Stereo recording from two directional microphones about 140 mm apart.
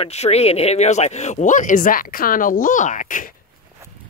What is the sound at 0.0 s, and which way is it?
Speech, 50° left (ahead or behind).